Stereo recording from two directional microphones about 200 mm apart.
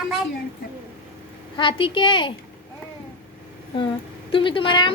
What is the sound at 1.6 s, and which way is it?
Speech, 25° left (ahead or behind).